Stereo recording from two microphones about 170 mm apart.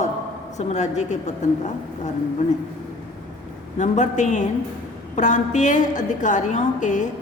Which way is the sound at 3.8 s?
45° left (ahead or behind).